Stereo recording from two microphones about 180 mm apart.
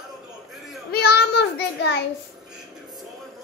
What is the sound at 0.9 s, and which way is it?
Child singing, 65° left (ahead or behind).